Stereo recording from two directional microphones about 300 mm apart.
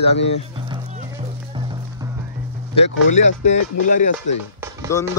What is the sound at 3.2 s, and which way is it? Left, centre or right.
Speech, left.